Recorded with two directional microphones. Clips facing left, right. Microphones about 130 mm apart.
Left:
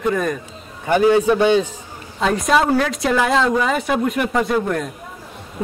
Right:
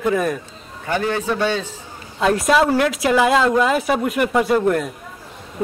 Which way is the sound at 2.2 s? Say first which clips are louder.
Right 1 dB; centre (ahead or behind).